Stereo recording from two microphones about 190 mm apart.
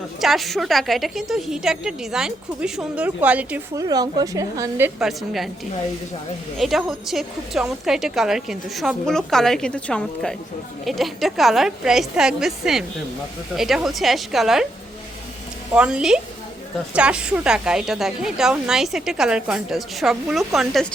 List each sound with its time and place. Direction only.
0.2 s a woman's voice: centre (ahead or behind)
3.8 s a woman's voice: 20° right (ahead or behind)
4.9 s a woman's voice: centre (ahead or behind)
6.6 s a woman's voice: centre (ahead or behind)
15.7 s a woman's voice: 5° right (ahead or behind)